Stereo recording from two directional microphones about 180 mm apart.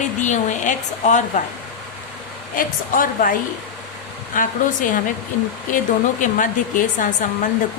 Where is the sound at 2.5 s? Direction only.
50° left (ahead or behind).